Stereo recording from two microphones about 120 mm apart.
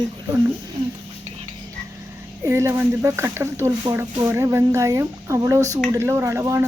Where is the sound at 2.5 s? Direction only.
20° right (ahead or behind).